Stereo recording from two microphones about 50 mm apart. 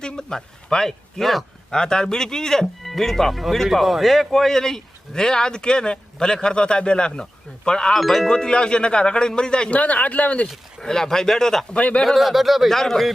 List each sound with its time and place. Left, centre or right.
0.0 s speech: centre
1.7 s speech: centre
7.9 s speech: centre
8.3 s speech: centre
10.8 s speech: centre
11.7 s a man's voice: left
12.0 s speech: centre